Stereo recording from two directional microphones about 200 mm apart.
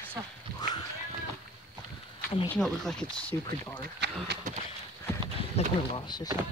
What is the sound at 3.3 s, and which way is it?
Speech, 15° left (ahead or behind).